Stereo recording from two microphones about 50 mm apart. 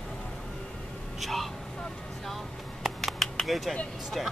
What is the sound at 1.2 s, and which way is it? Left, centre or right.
Vehicle, centre.